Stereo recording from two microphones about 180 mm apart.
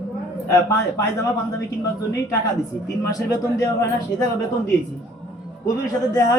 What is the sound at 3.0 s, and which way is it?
Speech, 20° left (ahead or behind).